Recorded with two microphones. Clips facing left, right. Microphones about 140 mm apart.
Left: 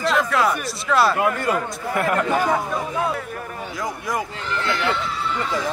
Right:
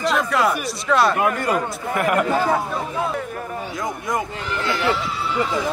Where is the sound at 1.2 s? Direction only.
20° right (ahead or behind).